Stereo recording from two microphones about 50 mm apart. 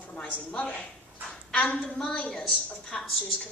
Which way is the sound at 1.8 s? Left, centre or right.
Centre.